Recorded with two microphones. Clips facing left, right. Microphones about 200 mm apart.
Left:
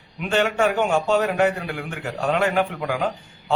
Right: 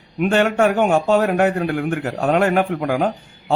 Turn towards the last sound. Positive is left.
turn(degrees=-50)  # may be behind; listen again after turning